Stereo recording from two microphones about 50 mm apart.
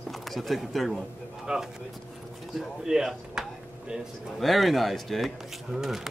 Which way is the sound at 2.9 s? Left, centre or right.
Centre.